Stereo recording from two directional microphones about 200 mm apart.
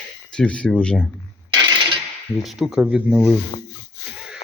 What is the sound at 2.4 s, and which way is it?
Speech, centre (ahead or behind).